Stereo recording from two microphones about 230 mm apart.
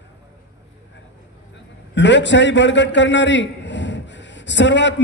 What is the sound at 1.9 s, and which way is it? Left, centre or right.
A man's voice, left.